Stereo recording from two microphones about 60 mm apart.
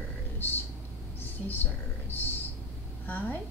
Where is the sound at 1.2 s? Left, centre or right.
Left.